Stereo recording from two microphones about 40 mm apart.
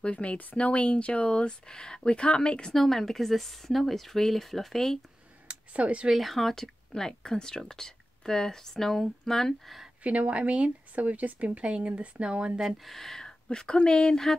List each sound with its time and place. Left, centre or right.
0.0 s speech: left
2.7 s speech: centre
5.5 s speech: right
6.1 s speech: centre
10.0 s speech: right
12.5 s speech: centre
13.2 s speech: centre